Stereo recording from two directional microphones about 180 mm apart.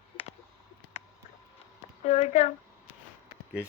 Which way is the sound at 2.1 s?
40° left (ahead or behind).